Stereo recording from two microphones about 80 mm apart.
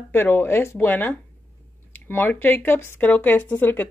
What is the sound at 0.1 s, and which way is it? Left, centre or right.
Speech, left.